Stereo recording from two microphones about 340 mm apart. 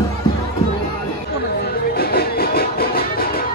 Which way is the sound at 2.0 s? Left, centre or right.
Left.